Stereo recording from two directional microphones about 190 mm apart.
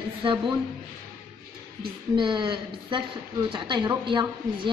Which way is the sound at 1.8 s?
25° right (ahead or behind).